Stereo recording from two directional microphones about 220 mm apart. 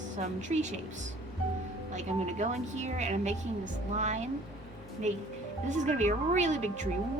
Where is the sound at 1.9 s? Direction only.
30° right (ahead or behind).